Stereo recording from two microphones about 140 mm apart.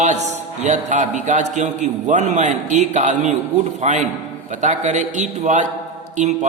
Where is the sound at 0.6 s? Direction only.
60° right (ahead or behind).